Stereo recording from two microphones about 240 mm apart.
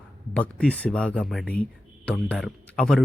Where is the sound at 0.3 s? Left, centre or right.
Centre.